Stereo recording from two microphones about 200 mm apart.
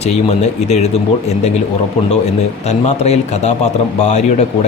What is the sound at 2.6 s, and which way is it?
Speech, 35° left (ahead or behind).